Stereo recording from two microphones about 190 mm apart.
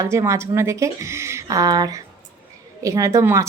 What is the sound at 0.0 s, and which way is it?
A woman's voice, 15° right (ahead or behind).